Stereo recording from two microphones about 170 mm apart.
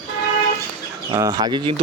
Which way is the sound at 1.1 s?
20° right (ahead or behind).